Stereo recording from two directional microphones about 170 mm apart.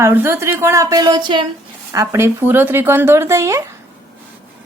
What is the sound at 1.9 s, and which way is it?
Speech, 15° right (ahead or behind).